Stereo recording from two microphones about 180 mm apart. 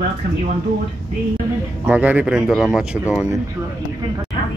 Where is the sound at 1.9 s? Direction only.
10° right (ahead or behind).